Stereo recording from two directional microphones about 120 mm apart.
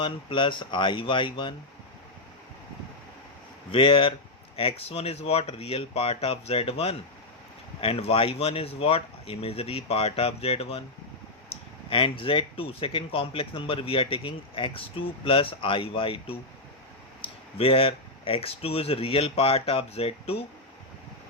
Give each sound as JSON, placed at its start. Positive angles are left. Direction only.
{"t": 0.0, "sound": "speech", "side_deg": 45}
{"t": 3.7, "sound": "speech", "side_deg": 50}